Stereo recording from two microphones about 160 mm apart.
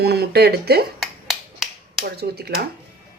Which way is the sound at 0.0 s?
85° right.